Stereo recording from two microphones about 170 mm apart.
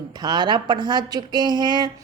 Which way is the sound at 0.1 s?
25° right (ahead or behind).